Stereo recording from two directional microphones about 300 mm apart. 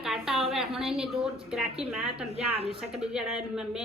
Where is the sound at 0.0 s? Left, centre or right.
Centre.